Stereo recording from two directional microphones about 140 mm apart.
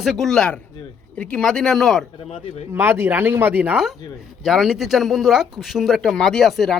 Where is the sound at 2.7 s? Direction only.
15° right (ahead or behind).